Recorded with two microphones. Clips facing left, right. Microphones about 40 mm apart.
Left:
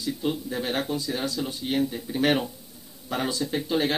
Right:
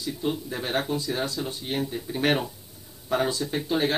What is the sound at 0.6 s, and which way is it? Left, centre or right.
Speech, centre.